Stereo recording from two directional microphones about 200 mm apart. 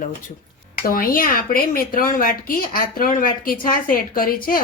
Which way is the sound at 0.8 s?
45° left (ahead or behind).